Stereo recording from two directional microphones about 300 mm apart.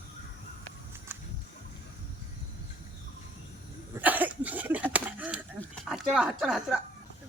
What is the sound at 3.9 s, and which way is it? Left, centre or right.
Cough, centre.